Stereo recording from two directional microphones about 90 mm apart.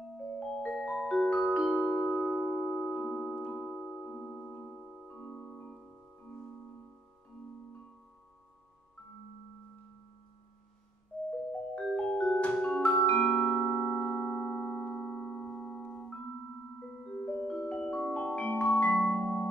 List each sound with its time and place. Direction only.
0.6 s music: 10° left (ahead or behind)
2.5 s music: 15° left (ahead or behind)
11.2 s music: 10° left (ahead or behind)